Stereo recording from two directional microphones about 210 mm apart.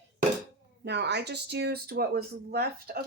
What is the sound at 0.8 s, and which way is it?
Speech, 55° right (ahead or behind).